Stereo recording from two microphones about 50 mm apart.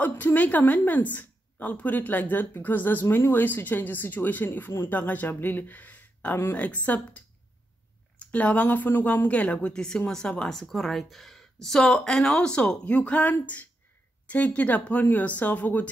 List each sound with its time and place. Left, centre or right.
0.0 s a woman's voice: left
8.2 s a woman's voice: left
9.8 s a woman's voice: centre; by 15.9 s left